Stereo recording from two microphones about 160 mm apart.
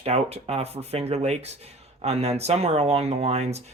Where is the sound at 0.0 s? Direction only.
40° right (ahead or behind).